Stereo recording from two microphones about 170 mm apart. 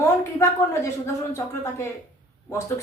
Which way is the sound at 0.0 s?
15° left (ahead or behind).